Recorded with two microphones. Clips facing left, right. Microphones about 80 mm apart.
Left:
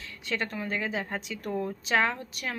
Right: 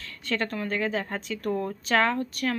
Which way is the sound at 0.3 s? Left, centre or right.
Centre.